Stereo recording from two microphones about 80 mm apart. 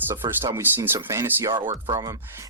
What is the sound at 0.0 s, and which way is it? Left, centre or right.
Speech, right.